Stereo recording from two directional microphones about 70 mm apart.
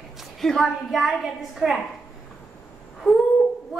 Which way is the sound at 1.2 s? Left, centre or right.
Centre.